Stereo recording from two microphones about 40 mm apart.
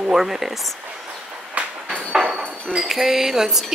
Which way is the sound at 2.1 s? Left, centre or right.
Centre.